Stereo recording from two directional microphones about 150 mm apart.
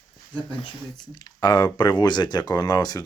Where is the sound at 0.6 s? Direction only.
30° left (ahead or behind).